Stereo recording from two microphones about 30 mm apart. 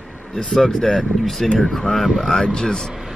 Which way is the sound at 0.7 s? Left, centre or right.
Centre.